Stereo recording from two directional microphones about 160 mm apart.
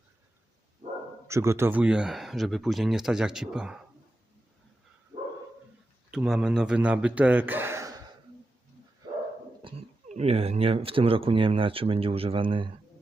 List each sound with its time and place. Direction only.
1.3 s a man's voice: 15° right (ahead or behind)
5.1 s dog: 40° right (ahead or behind)
6.1 s a man's voice: 5° right (ahead or behind)
9.6 s a sound: 30° right (ahead or behind)
10.1 s speech: 40° right (ahead or behind)